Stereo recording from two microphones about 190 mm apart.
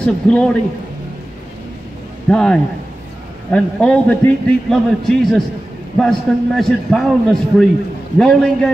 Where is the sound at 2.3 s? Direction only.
5° left (ahead or behind).